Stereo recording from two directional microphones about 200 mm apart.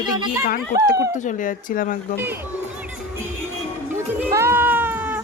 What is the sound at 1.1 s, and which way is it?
Speech, 40° left (ahead or behind).